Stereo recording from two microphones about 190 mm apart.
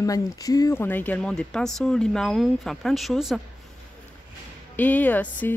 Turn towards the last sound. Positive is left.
turn(degrees=10)  # may be behind; listen again after turning